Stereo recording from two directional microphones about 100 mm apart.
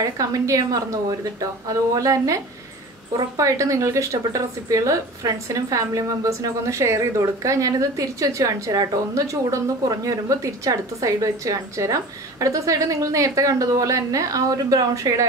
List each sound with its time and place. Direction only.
0.0 s speech: 35° right (ahead or behind)